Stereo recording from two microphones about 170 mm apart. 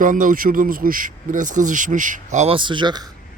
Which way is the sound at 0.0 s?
50° right (ahead or behind).